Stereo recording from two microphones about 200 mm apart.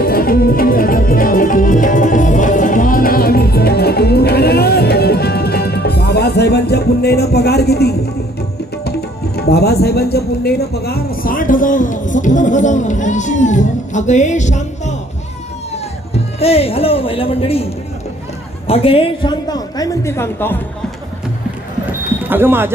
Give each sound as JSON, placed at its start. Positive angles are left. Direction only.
{"t": 0.0, "sound": "music", "side_deg": 50}
{"t": 9.3, "sound": "music", "side_deg": 50}
{"t": 16.1, "sound": "music", "side_deg": 30}
{"t": 18.7, "sound": "a woman's voice", "side_deg": 25}
{"t": 22.3, "sound": "speech", "side_deg": -10}